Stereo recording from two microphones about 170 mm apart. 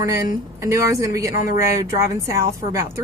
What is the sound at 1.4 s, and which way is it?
Speech, 55° left (ahead or behind).